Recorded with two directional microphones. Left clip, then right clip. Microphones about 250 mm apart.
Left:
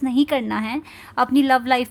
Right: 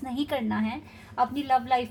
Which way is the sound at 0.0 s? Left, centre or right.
Left.